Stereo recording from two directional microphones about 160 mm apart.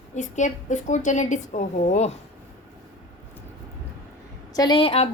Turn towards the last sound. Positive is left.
turn(degrees=40)  # may be behind; listen again after turning